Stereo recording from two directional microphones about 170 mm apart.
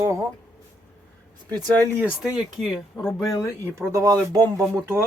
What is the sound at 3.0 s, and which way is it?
Speech, 20° left (ahead or behind).